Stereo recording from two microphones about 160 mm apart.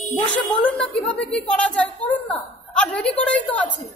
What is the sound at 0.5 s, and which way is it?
A woman's voice, 5° left (ahead or behind).